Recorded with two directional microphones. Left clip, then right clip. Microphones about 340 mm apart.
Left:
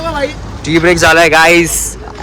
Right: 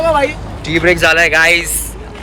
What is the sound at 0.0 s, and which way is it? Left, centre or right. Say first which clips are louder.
Vehicle: right 4 dB; centre.